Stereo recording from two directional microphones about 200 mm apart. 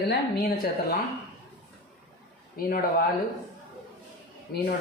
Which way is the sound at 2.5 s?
50° left (ahead or behind).